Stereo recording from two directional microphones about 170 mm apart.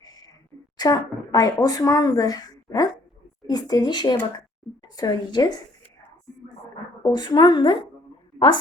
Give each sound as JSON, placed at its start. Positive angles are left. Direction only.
{"t": 0.0, "sound": "a sound", "side_deg": 25}
{"t": 0.8, "sound": "a woman's voice", "side_deg": 20}
{"t": 7.0, "sound": "a woman's voice", "side_deg": 25}